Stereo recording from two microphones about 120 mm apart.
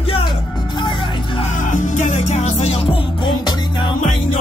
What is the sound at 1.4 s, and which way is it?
Music, 90° left.